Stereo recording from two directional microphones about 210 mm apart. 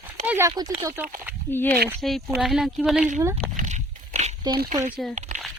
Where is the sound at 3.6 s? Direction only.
35° right (ahead or behind).